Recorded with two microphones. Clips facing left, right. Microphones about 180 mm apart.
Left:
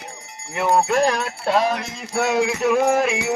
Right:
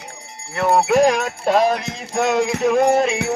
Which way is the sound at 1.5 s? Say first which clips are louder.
Right 3 dB; 45° right (ahead or behind).